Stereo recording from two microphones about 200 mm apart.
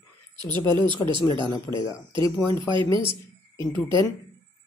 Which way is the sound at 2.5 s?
25° right (ahead or behind).